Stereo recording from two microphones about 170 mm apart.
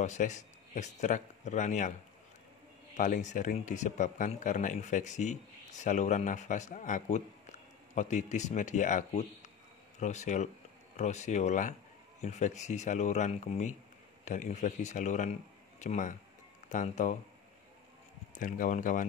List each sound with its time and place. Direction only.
0.0 s speech: 45° left (ahead or behind)
3.0 s speech: 45° left (ahead or behind)
18.3 s speech: 50° left (ahead or behind)